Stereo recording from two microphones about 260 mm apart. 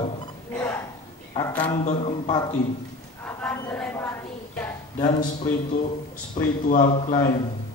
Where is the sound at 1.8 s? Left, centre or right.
Left.